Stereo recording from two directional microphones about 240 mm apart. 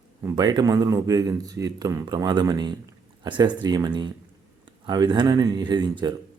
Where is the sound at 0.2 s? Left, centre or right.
Centre.